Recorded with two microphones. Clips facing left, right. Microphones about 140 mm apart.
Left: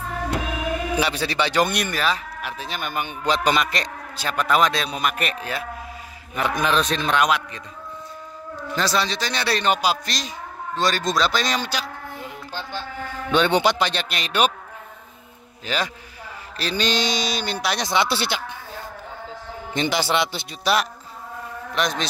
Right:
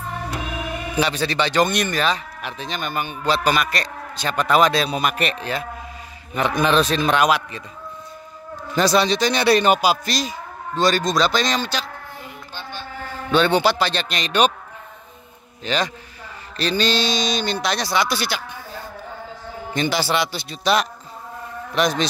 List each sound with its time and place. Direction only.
0.9 s speech: 10° left (ahead or behind)
4.2 s a man's voice: 5° left (ahead or behind)
8.7 s a man's voice: 15° right (ahead or behind); by 11.9 s 10° left (ahead or behind)
13.3 s speech: 20° left (ahead or behind)
15.6 s speech: 5° left (ahead or behind)
17.8 s a man's voice: 25° left (ahead or behind)
19.7 s a man's voice: 20° left (ahead or behind)
20.7 s a man's voice: 5° left (ahead or behind)